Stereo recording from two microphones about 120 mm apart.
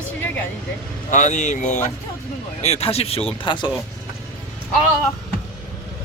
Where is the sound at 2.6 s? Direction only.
60° left (ahead or behind); by 3.7 s 40° left (ahead or behind).